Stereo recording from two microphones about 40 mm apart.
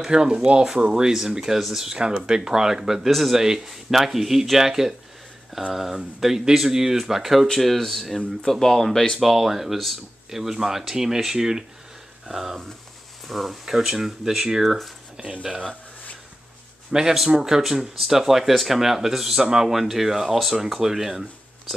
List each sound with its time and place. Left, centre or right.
0.0 s speech: centre
7.5 s speech: centre
9.2 s speech: centre
15.4 s speech: right
16.9 s speech: right